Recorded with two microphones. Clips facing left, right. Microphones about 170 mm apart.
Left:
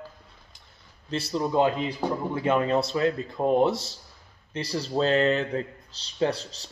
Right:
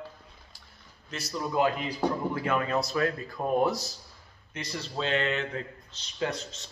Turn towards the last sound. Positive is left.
turn(degrees=35)  # may be behind; listen again after turning